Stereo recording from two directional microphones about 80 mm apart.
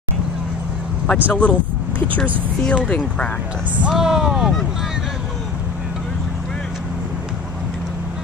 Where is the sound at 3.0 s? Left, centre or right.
Centre.